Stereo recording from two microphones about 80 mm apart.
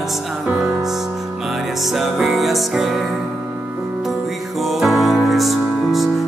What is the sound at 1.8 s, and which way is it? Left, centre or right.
Music, centre.